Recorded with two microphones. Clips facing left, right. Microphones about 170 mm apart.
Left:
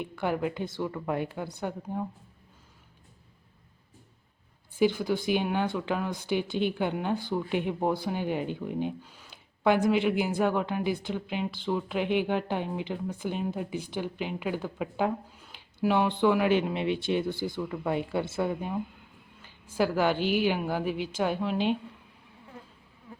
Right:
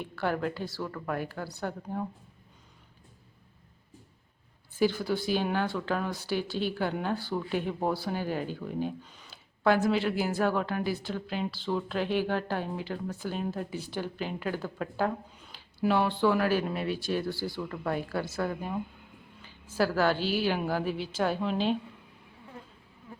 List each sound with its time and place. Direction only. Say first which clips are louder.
0.0 s speech: left 1 dB; 15° left (ahead or behind)
1.6 s speech: left 1 dB; 10° left (ahead or behind)
4.8 s speech: left 2 dB; 15° left (ahead or behind)
19.7 s speech: left 1 dB; 15° left (ahead or behind)